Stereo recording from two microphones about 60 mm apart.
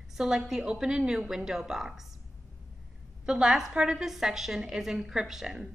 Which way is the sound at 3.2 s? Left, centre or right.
Centre.